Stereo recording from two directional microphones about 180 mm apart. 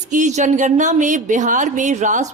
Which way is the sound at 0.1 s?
45° right (ahead or behind).